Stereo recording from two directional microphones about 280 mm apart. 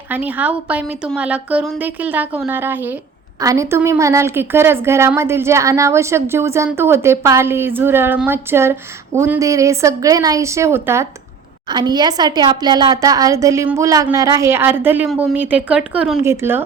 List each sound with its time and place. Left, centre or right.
0.1 s a woman's voice: centre